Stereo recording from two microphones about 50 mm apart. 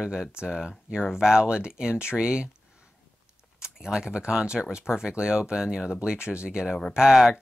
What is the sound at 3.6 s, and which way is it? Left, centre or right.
Speech, centre.